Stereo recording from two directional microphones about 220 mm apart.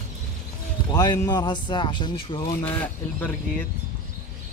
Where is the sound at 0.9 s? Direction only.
20° left (ahead or behind).